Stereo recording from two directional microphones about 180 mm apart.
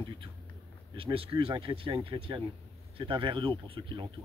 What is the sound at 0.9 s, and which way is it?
Speech, 30° right (ahead or behind).